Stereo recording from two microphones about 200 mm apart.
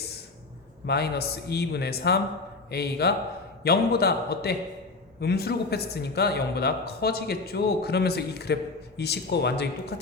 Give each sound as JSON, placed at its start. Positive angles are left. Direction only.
{"t": 0.9, "sound": "speech", "side_deg": 55}